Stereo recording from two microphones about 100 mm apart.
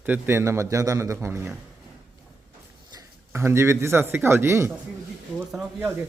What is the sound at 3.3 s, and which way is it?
A man's voice, 25° right (ahead or behind).